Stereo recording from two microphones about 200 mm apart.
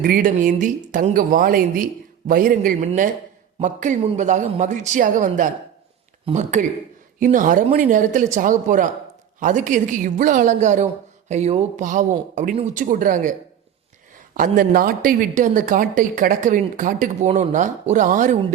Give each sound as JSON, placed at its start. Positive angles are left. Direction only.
{"t": 0.0, "sound": "a woman's voice", "side_deg": -45}
{"t": 14.3, "sound": "a woman's voice", "side_deg": -45}